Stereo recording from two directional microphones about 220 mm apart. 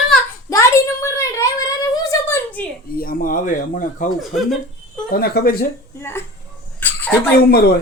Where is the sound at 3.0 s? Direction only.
40° left (ahead or behind).